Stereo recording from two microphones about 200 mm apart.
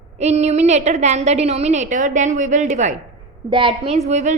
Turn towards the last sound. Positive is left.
turn(degrees=-35)  # may be behind; listen again after turning